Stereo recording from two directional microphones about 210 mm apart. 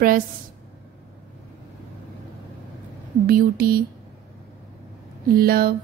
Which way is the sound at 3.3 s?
45° right (ahead or behind).